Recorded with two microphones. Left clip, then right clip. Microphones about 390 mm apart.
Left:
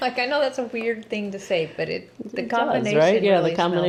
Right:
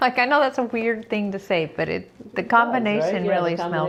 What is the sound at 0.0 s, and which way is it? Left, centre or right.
A woman's voice, right.